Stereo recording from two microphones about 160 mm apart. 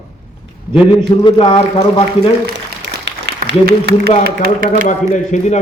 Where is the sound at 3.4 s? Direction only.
90° right.